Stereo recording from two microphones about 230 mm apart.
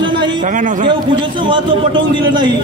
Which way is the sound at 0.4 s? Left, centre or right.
Right.